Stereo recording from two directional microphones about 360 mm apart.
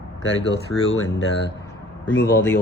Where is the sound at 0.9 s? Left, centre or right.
Left.